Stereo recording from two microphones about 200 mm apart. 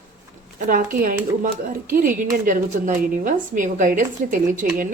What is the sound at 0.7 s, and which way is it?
A woman's voice, 45° right (ahead or behind).